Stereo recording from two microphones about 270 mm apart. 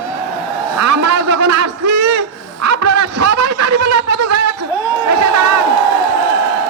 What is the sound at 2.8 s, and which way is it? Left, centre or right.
Snicker, right.